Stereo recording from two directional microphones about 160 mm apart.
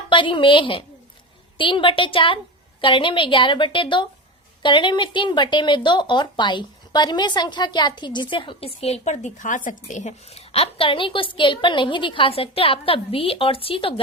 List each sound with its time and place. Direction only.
0.1 s speech: 30° left (ahead or behind)